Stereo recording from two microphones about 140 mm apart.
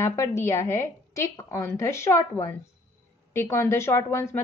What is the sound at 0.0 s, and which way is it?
A woman's voice, 20° left (ahead or behind).